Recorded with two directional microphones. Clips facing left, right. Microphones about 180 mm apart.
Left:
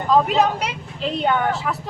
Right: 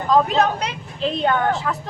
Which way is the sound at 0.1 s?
5° left (ahead or behind).